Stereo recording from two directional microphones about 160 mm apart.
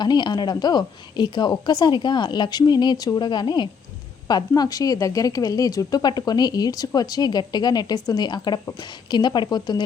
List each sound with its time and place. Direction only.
0.0 s speech: 25° left (ahead or behind)